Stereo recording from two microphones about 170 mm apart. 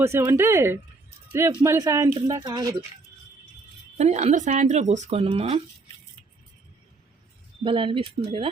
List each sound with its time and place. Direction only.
0.0 s speech: 15° right (ahead or behind)
3.9 s speech: 40° right (ahead or behind)
7.6 s speech: 30° right (ahead or behind)